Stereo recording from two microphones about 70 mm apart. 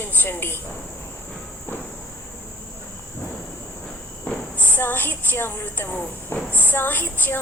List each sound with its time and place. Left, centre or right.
0.0 s speech: left
4.5 s a woman's voice: left